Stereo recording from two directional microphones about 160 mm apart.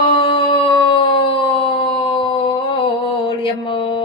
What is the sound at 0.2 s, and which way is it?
Howl, 35° left (ahead or behind).